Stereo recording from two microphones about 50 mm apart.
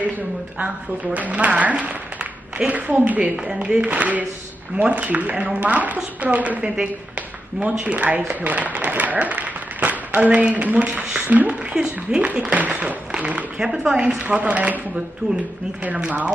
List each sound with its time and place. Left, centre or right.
0.6 s a woman's voice: right
3.6 s a woman's voice: centre
3.9 s a woman's voice: right
7.8 s a woman's voice: right
11.7 s a woman's voice: centre
15.2 s speech: left
15.8 s a woman's voice: right